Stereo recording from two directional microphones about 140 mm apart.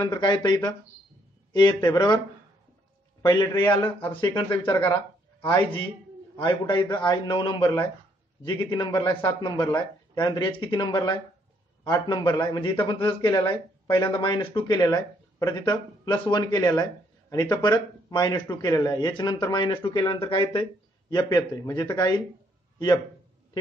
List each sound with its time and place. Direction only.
0.0 s a man's voice: 30° left (ahead or behind)